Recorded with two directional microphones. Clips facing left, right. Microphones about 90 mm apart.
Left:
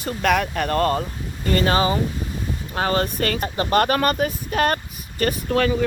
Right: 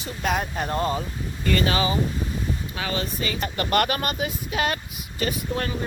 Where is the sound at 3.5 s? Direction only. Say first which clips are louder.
Left 4 dB; 30° left (ahead or behind).